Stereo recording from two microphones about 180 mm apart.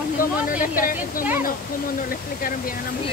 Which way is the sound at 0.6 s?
50° left (ahead or behind).